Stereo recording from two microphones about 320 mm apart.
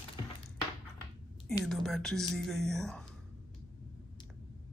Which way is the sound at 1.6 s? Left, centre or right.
Centre.